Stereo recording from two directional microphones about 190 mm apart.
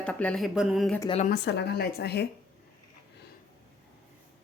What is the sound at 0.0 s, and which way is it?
Speech, 5° left (ahead or behind).